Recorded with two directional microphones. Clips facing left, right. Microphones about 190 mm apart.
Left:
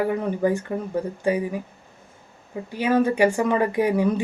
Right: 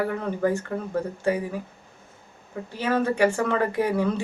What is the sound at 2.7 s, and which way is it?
Speech, 15° left (ahead or behind).